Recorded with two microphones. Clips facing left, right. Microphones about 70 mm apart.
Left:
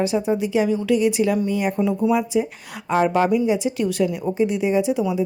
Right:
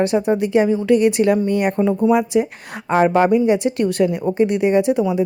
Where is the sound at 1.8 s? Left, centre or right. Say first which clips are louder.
Right 4 dB; right.